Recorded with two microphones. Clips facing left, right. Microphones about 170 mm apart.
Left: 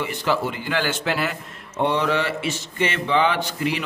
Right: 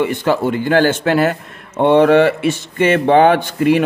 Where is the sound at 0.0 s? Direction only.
50° right (ahead or behind).